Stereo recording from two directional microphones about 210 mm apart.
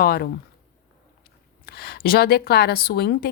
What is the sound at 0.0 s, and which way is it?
Speech, 45° left (ahead or behind).